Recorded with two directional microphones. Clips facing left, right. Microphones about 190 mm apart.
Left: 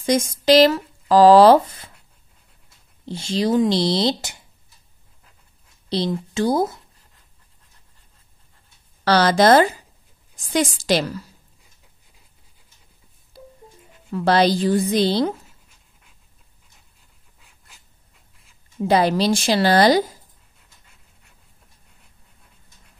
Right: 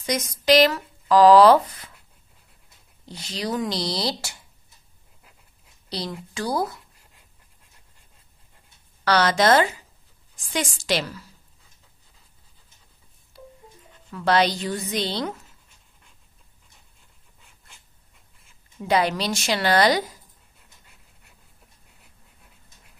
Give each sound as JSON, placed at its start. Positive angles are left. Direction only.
{"t": 0.0, "sound": "speech", "side_deg": 30}
{"t": 3.1, "sound": "speech", "side_deg": 25}
{"t": 5.9, "sound": "a woman's voice", "side_deg": 25}
{"t": 9.0, "sound": "a woman's voice", "side_deg": 30}
{"t": 14.1, "sound": "a woman's voice", "side_deg": 35}
{"t": 17.4, "sound": "a sound", "side_deg": 0}
{"t": 18.8, "sound": "a woman's voice", "side_deg": 35}
{"t": 20.5, "sound": "pant", "side_deg": 0}